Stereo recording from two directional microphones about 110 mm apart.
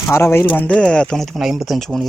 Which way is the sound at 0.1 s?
20° left (ahead or behind).